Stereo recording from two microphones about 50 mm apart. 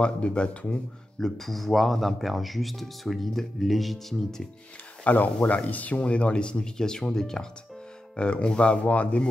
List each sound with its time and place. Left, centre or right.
0.0 s speech: left
1.2 s speech: centre
5.0 s speech: left; by 7.4 s centre
8.2 s speech: left